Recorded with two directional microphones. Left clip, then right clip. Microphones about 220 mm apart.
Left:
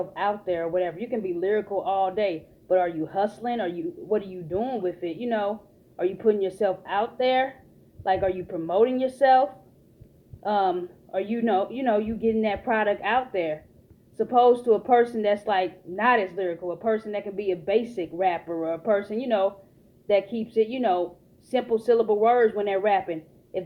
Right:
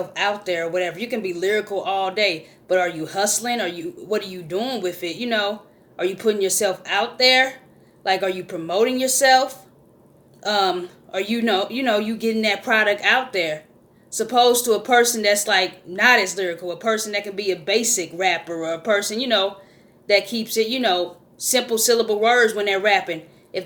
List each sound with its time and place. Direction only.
0.1 s speech: 20° right (ahead or behind)